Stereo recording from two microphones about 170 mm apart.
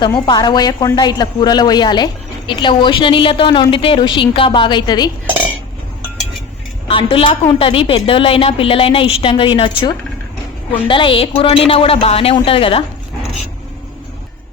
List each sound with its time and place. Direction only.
0.3 s a woman's voice: 25° left (ahead or behind)
6.8 s a woman's voice: 30° left (ahead or behind)